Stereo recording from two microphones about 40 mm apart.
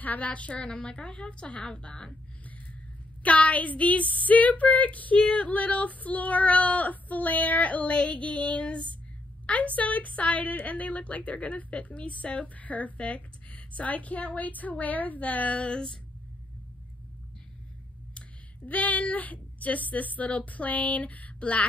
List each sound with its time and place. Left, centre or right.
0.0 s a woman's voice: left
3.2 s a woman's voice: left
15.6 s a woman's voice: left
18.7 s a woman's voice: left